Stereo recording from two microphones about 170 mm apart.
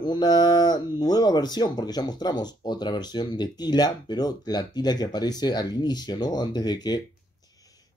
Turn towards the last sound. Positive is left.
turn(degrees=20)  # may be behind; listen again after turning